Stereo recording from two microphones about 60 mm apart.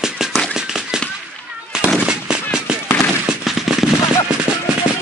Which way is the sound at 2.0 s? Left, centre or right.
Centre.